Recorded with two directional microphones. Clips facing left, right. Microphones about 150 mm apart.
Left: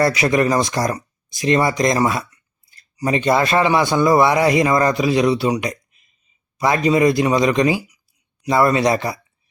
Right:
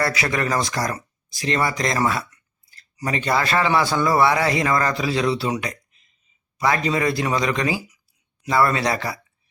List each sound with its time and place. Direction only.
0.0 s a man's voice: 20° left (ahead or behind)